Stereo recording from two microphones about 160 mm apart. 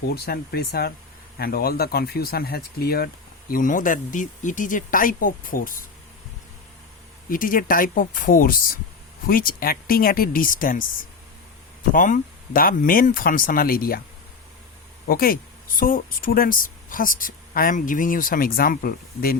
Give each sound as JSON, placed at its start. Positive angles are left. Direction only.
{"t": 0.1, "sound": "speech", "side_deg": 80}
{"t": 3.5, "sound": "speech", "side_deg": 60}
{"t": 7.3, "sound": "speech", "side_deg": 60}
{"t": 11.9, "sound": "speech", "side_deg": 55}
{"t": 15.0, "sound": "speech", "side_deg": 65}